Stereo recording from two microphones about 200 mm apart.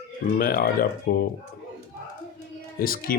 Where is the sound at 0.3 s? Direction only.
50° left (ahead or behind).